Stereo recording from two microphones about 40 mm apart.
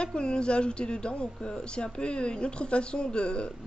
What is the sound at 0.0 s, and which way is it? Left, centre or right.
A woman's voice, left.